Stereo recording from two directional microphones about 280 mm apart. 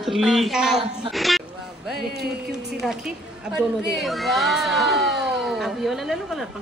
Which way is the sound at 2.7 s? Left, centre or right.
Centre.